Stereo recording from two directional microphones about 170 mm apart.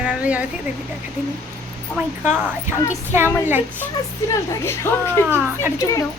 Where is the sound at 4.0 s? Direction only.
20° left (ahead or behind).